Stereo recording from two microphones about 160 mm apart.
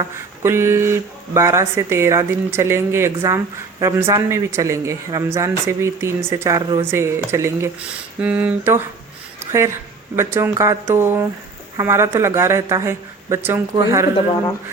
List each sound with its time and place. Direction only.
0.4 s speech: 15° right (ahead or behind)